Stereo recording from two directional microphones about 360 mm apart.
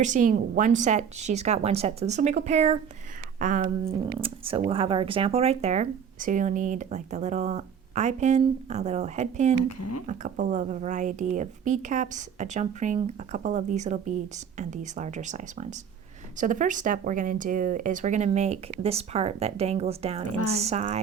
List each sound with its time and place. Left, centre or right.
0.0 s speech: right
9.6 s a woman's voice: left
10.1 s speech: right
20.2 s speech: left
20.5 s speech: centre